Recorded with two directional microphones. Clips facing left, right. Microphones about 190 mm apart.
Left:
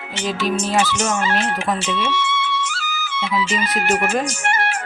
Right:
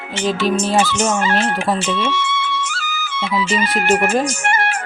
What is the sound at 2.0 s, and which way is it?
Music, 50° right (ahead or behind).